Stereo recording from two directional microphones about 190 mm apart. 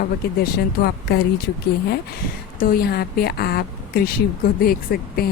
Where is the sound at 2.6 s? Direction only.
50° left (ahead or behind).